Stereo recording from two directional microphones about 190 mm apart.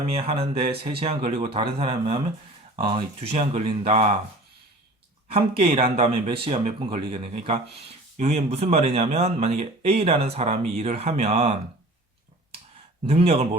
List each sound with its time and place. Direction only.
0.1 s speech: 30° right (ahead or behind)
5.3 s speech: 30° right (ahead or behind)
13.1 s speech: 30° right (ahead or behind)